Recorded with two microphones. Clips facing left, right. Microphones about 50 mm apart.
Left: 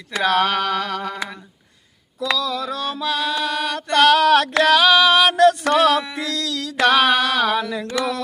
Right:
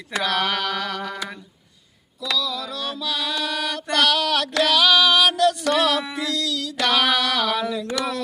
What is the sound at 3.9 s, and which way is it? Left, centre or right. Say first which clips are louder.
Music: left 7 dB; left.